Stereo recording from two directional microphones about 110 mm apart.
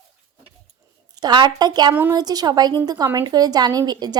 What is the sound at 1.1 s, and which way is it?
A woman's voice, 40° right (ahead or behind).